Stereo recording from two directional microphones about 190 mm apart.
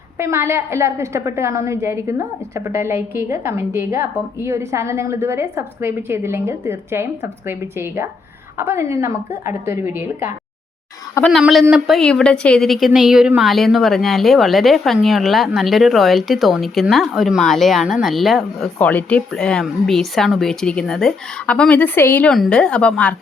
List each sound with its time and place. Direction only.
0.2 s a woman's voice: 15° right (ahead or behind)
11.3 s a woman's voice: centre (ahead or behind)